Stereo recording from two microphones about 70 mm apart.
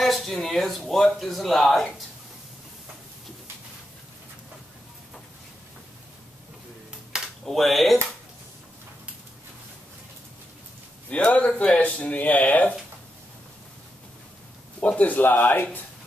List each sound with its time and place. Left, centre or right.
0.0 s speech: centre
7.4 s speech: centre
11.1 s speech: centre
14.8 s speech: left